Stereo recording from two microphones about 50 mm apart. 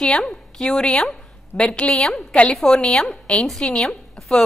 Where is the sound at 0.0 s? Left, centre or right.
Centre.